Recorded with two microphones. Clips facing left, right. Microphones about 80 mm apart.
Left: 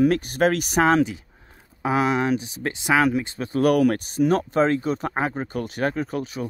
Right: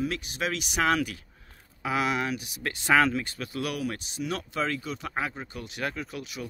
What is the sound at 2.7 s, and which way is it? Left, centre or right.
Speech, centre.